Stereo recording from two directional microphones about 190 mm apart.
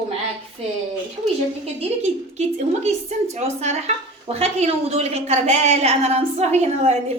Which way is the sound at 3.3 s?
35° right (ahead or behind).